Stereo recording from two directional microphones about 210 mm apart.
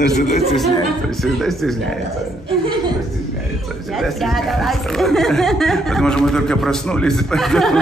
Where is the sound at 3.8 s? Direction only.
Centre (ahead or behind).